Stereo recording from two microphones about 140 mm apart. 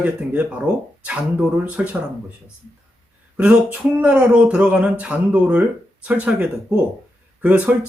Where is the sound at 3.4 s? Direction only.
10° right (ahead or behind).